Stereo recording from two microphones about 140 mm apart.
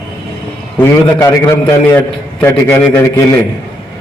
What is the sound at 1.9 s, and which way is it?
A man's voice, 15° left (ahead or behind).